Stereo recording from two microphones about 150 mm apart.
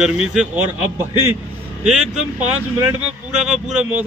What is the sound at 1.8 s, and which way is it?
A man's voice, 5° right (ahead or behind).